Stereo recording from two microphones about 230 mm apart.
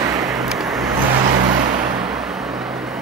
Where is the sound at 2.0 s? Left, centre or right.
Centre.